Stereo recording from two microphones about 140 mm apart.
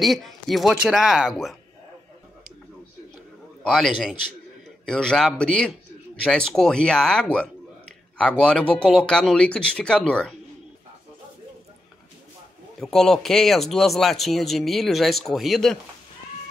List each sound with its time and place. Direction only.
0.0 s speech: centre (ahead or behind)
3.6 s speech: centre (ahead or behind)
12.8 s speech: 5° left (ahead or behind)